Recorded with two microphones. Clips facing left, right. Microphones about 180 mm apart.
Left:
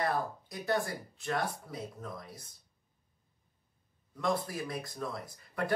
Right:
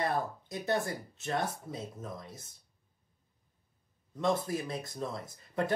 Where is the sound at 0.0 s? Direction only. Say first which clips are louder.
Even; 20° right (ahead or behind).